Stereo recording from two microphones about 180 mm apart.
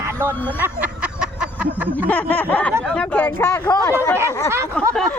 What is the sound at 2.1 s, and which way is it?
Speech, 10° left (ahead or behind).